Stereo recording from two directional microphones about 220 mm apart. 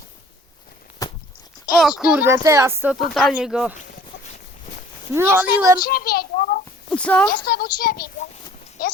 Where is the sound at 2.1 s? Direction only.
10° right (ahead or behind).